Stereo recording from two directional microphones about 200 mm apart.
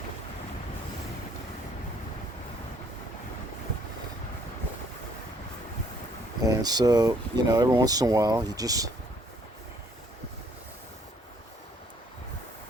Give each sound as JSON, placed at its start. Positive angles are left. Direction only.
{"t": 6.4, "sound": "speech", "side_deg": -20}